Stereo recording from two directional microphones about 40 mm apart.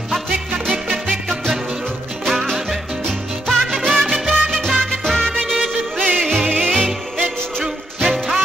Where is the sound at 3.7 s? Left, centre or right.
Centre.